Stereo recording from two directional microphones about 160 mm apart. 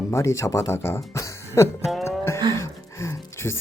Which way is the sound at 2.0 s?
15° left (ahead or behind).